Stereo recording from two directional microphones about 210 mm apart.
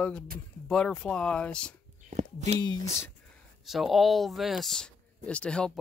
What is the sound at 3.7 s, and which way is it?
Speech, centre (ahead or behind).